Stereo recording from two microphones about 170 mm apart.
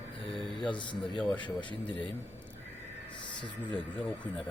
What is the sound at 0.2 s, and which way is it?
Mantra, 30° left (ahead or behind).